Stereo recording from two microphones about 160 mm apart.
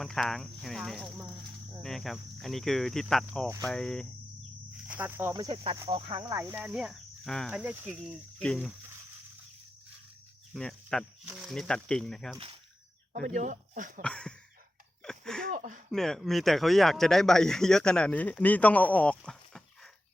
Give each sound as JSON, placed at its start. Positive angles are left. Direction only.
{"t": 0.0, "sound": "speech", "side_deg": 5}
{"t": 4.8, "sound": "speech", "side_deg": -10}
{"t": 5.9, "sound": "speech", "side_deg": -35}
{"t": 6.3, "sound": "cricket", "side_deg": -15}
{"t": 6.6, "sound": "speech", "side_deg": -5}
{"t": 7.6, "sound": "cricket", "side_deg": -10}
{"t": 8.4, "sound": "speech", "side_deg": 0}
{"t": 10.5, "sound": "speech", "side_deg": 5}
{"t": 13.1, "sound": "speech", "side_deg": -50}
{"t": 14.0, "sound": "speech", "side_deg": 5}
{"t": 15.0, "sound": "a sound", "side_deg": 5}
{"t": 15.4, "sound": "a sound", "side_deg": -55}
{"t": 15.9, "sound": "speech", "side_deg": 0}